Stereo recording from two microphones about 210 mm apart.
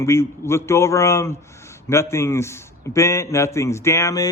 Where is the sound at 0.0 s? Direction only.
10° left (ahead or behind).